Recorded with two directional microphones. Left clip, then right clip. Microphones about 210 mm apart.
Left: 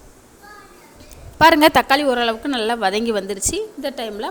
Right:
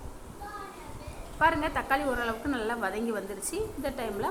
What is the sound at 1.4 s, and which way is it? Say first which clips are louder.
A woman's voice: left 15 dB; 50° left (ahead or behind).